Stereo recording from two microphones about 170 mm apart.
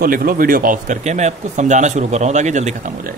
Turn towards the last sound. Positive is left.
turn(degrees=-45)  # may be behind; listen again after turning